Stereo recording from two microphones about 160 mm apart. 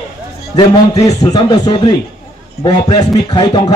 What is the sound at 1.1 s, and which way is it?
A man's voice, 25° left (ahead or behind).